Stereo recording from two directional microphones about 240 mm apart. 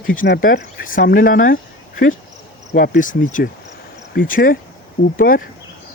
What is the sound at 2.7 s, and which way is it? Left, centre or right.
Speech, left.